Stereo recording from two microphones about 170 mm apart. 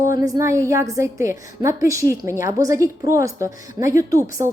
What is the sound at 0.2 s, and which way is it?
A woman's voice, 20° right (ahead or behind).